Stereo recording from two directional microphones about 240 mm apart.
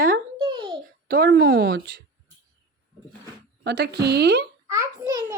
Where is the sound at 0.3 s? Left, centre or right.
Right.